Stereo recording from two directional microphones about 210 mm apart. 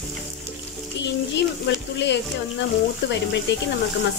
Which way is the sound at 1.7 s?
55° left (ahead or behind).